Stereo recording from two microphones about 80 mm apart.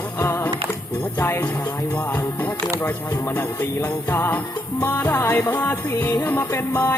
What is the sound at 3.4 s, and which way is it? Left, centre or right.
Music, left.